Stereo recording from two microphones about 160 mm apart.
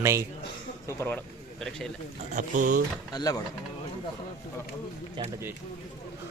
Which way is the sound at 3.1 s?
25° left (ahead or behind).